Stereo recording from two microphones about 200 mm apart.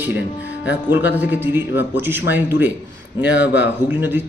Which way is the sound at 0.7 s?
10° right (ahead or behind).